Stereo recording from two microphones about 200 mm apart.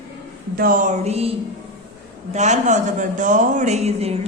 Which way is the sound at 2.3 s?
35° right (ahead or behind).